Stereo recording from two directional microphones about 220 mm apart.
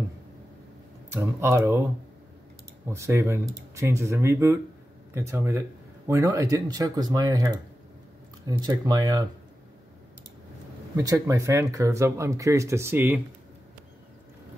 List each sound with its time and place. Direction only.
1.1 s speech: 10° right (ahead or behind)
2.9 s speech: 10° right (ahead or behind)
11.0 s speech: 15° right (ahead or behind)